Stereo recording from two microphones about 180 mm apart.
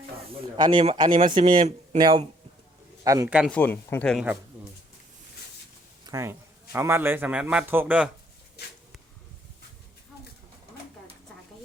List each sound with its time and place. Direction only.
0.3 s a man's voice: 25° right (ahead or behind)
3.5 s speech: 10° left (ahead or behind)
6.1 s a man's voice: 20° right (ahead or behind)